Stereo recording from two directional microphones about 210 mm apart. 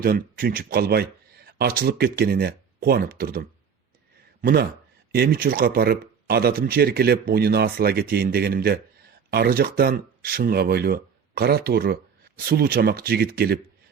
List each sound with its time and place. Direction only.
0.0 s speech: 45° right (ahead or behind)
4.4 s a sound: 45° right (ahead or behind)
5.1 s speech: 45° right (ahead or behind)